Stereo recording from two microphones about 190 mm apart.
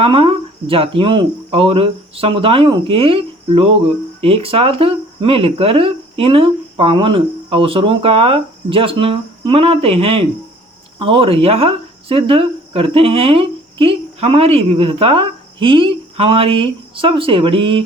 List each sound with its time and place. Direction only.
0.0 s speech: 30° right (ahead or behind)